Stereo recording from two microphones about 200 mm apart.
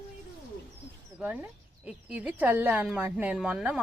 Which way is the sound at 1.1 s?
10° right (ahead or behind).